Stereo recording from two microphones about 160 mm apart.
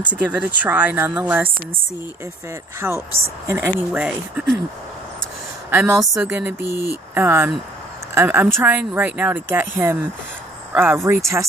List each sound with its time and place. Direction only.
0.1 s speech: 10° right (ahead or behind)
2.8 s speech: 5° right (ahead or behind)
5.7 s a woman's voice: 15° right (ahead or behind)
5.9 s a woman's voice: centre (ahead or behind)
6.3 s speech: 15° right (ahead or behind)